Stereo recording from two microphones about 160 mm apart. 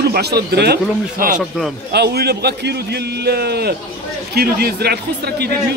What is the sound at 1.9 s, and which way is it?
A man's voice, 85° right.